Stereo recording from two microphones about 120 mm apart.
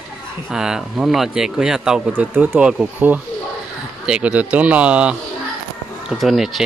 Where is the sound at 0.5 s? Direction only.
5° right (ahead or behind).